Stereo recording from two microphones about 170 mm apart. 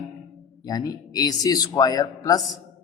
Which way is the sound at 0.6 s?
20° left (ahead or behind).